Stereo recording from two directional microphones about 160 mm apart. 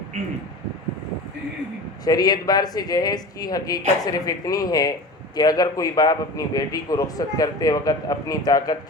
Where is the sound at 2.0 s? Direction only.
25° left (ahead or behind).